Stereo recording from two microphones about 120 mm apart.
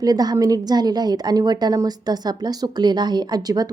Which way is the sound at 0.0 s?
35° right (ahead or behind).